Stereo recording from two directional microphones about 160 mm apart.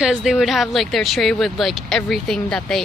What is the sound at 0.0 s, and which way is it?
Speech, centre (ahead or behind).